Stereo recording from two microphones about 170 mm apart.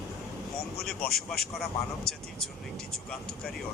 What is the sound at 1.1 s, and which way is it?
Speech, centre (ahead or behind).